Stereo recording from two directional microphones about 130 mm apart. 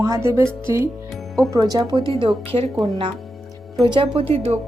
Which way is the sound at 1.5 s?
30° right (ahead or behind).